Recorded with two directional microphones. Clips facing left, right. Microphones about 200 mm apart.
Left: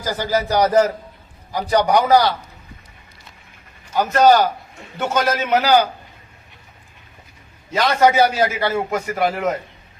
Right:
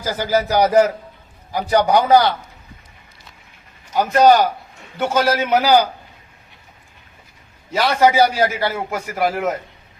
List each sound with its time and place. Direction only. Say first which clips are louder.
0.0 s a man's voice: right 2 dB; 10° right (ahead or behind)
1.9 s a man's voice: right 1 dB; 25° right (ahead or behind)
3.9 s a man's voice: right 1 dB; 15° right (ahead or behind)
7.7 s a man's voice: even; 10° right (ahead or behind)